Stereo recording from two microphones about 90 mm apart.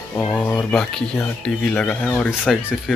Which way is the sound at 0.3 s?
15° left (ahead or behind).